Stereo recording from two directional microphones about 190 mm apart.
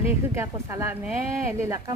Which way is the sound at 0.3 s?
15° right (ahead or behind).